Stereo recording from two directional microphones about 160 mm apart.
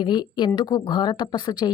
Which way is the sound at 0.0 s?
30° left (ahead or behind).